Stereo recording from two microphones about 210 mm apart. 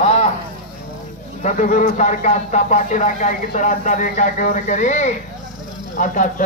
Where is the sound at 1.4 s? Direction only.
35° left (ahead or behind).